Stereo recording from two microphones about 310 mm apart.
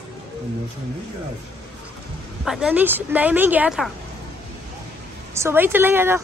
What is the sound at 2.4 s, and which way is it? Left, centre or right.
Speech, centre.